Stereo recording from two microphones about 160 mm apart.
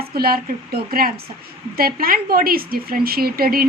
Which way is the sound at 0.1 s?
70° right (ahead or behind).